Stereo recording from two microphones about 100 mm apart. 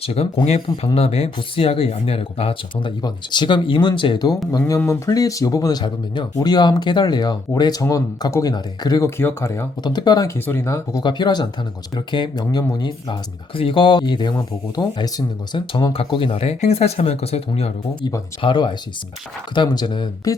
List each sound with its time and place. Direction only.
0.0 s speech: 85° left
1.4 s speech: 75° left (ahead or behind)
3.0 s speech: 50° left (ahead or behind)
4.9 s speech: 35° left (ahead or behind)
9.0 s speech: 25° left (ahead or behind)
9.8 s speech: 45° left (ahead or behind)
10.2 s speech: 20° left (ahead or behind)
11.0 s speech: 45° left (ahead or behind)
15.5 s speech: 55° left (ahead or behind)
16.0 s speech: 50° left (ahead or behind)
16.4 s speech: 90° left
18.4 s speech: 50° left (ahead or behind)
20.3 s speech: 35° left (ahead or behind)